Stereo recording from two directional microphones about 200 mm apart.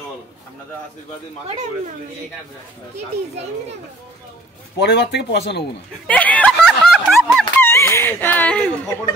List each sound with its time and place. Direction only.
4.7 s speech: 55° left (ahead or behind)
6.0 s a sound: 5° left (ahead or behind)
7.6 s speech: 10° left (ahead or behind)